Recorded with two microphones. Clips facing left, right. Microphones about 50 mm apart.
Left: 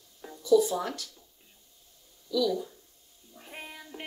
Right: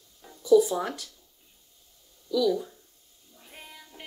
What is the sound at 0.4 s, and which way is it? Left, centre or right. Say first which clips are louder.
Speech: right 3 dB; centre.